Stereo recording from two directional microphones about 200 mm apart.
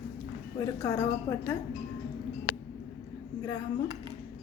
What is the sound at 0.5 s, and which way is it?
Speech, 15° left (ahead or behind).